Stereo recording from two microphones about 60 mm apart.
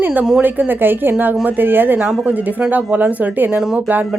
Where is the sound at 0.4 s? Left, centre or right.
Right.